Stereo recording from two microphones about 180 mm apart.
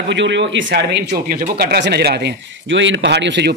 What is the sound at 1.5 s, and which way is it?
Speech, 60° right (ahead or behind).